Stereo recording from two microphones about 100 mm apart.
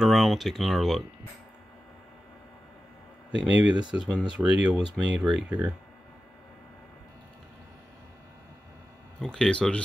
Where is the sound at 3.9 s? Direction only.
5° right (ahead or behind).